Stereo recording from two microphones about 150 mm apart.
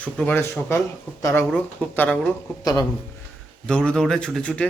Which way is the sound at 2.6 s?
25° left (ahead or behind).